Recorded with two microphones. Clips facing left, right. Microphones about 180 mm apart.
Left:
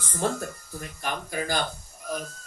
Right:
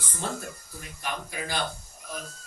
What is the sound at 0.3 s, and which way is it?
Speech, 45° left (ahead or behind).